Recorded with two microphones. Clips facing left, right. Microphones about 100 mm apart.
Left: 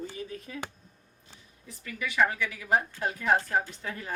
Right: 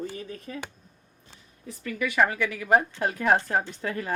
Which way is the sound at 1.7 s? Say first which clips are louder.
Right 7 dB; 60° right (ahead or behind).